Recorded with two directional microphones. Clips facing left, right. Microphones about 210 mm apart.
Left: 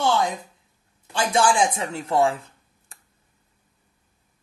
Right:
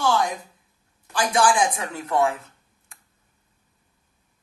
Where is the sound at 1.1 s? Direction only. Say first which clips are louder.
Even; 25° left (ahead or behind).